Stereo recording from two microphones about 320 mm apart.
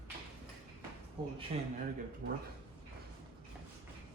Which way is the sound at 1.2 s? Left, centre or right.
Centre.